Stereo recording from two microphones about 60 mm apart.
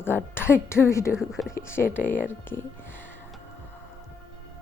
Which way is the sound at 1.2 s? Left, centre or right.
Centre.